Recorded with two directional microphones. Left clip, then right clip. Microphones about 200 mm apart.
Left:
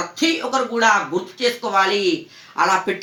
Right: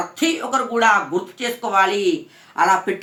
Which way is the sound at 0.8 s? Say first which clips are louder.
Right 1 dB; 25° right (ahead or behind).